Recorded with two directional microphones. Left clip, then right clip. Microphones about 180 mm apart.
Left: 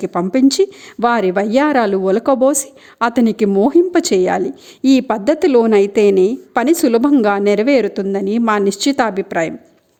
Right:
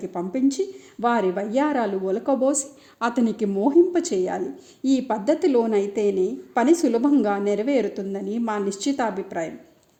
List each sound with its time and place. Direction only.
0.0 s speech: 60° left (ahead or behind)